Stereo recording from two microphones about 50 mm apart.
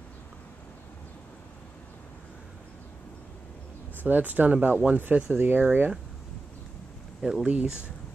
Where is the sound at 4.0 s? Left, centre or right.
Right.